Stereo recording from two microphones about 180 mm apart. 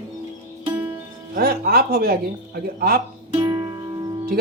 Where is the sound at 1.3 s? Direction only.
55° right (ahead or behind).